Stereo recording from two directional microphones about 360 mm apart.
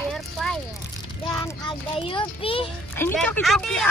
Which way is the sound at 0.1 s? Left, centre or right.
Centre.